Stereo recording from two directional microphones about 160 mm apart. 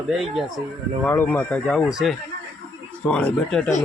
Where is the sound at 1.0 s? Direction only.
10° left (ahead or behind).